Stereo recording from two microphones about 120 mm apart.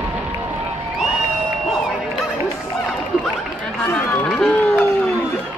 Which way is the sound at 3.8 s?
15° left (ahead or behind).